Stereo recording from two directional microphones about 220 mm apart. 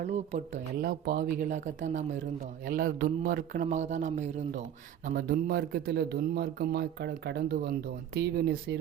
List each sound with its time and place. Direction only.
0.0 s a man's voice: 30° right (ahead or behind)
1.0 s a man's voice: 45° right (ahead or behind)